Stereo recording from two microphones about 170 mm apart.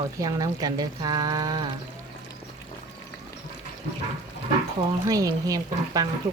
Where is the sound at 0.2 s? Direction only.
20° right (ahead or behind).